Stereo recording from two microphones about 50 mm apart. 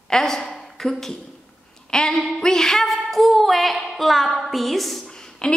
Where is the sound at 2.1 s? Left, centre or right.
Centre.